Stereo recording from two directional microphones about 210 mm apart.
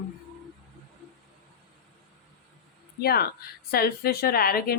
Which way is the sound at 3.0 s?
45° left (ahead or behind).